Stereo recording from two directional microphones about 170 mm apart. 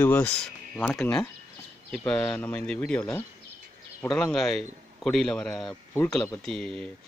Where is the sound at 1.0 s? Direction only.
15° left (ahead or behind).